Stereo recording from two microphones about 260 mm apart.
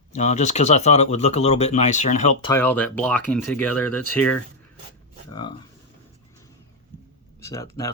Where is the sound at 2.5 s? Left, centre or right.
Centre.